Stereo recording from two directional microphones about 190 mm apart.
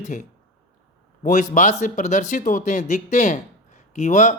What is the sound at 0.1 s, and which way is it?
A man's voice, 40° left (ahead or behind).